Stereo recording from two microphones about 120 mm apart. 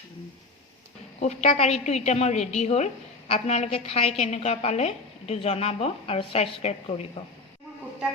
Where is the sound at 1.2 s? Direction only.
65° left (ahead or behind).